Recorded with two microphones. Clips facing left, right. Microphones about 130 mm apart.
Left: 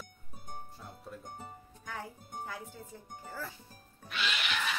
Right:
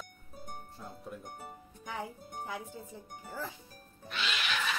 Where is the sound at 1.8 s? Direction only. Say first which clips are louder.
Right 3 dB; 15° right (ahead or behind).